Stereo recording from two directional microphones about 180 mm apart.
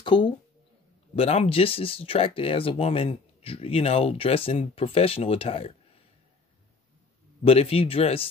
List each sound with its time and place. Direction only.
0.0 s speech: 25° left (ahead or behind)
7.4 s speech: 35° left (ahead or behind)